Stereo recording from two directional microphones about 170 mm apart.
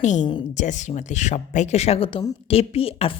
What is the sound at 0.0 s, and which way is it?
A woman's voice, 45° left (ahead or behind).